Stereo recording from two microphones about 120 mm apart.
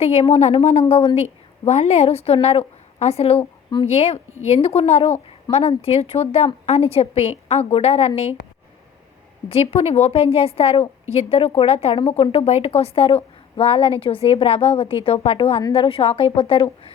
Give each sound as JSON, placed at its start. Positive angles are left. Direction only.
{"t": 0.0, "sound": "a woman's voice", "side_deg": 60}
{"t": 9.5, "sound": "a woman's voice", "side_deg": 55}